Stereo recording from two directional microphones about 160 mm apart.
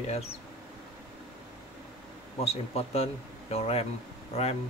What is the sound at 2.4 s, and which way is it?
Speech, 40° left (ahead or behind).